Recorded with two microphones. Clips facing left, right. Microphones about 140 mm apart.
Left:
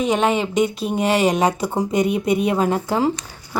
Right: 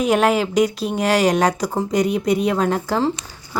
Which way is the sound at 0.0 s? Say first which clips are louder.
Right 2 dB; 5° right (ahead or behind).